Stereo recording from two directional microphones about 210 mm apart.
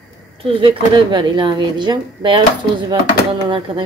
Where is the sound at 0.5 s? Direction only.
25° right (ahead or behind).